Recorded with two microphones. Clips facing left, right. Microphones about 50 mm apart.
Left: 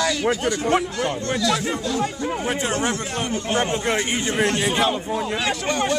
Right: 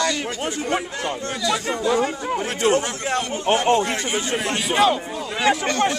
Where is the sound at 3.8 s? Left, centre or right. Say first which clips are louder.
Left 2 dB; left.